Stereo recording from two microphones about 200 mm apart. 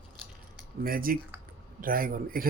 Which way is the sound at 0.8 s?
45° right (ahead or behind).